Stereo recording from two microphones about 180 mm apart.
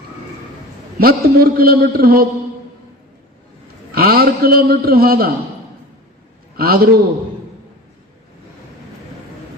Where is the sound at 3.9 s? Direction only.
55° right (ahead or behind).